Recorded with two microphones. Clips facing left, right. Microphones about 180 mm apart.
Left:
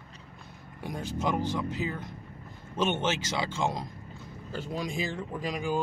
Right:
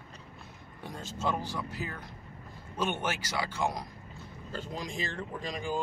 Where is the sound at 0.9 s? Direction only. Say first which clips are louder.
Left 3 dB; 15° left (ahead or behind).